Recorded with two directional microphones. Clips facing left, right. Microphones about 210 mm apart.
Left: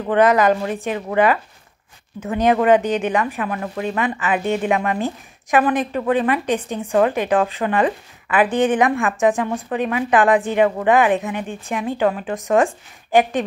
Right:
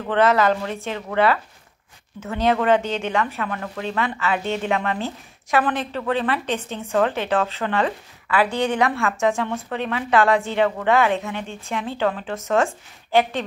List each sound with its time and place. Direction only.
0.0 s speech: 15° left (ahead or behind)